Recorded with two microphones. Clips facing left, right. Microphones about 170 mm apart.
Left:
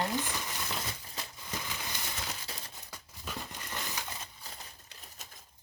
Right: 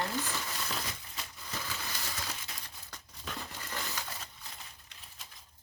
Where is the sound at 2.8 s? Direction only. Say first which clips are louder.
Right 1 dB; 5° left (ahead or behind).